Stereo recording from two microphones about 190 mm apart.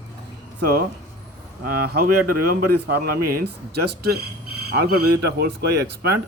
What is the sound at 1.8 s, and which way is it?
Speech, 55° right (ahead or behind).